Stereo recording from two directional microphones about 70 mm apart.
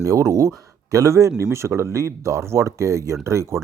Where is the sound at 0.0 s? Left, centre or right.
Right.